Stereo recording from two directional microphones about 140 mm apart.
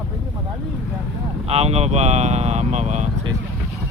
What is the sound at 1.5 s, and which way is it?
Speech, 50° right (ahead or behind).